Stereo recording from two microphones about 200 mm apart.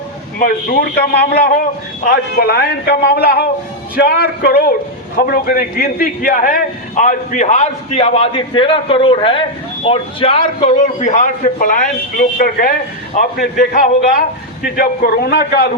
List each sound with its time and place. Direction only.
0.3 s a man's voice: 45° left (ahead or behind)